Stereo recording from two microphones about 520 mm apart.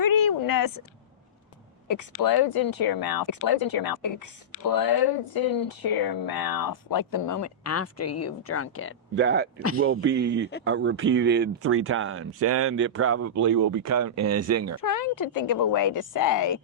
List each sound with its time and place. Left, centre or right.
0.0 s a sound: left
1.9 s speech: left
9.1 s speech: centre
14.8 s speech: left